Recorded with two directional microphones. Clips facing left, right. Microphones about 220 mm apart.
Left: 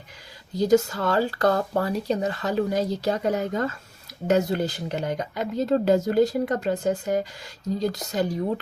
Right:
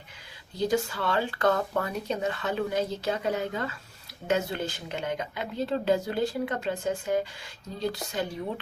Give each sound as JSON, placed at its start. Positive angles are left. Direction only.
{"t": 0.6, "sound": "speech", "side_deg": 40}